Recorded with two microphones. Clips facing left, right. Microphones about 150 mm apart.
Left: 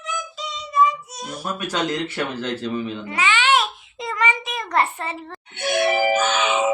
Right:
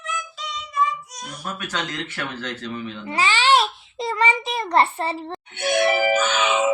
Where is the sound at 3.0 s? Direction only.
35° right (ahead or behind).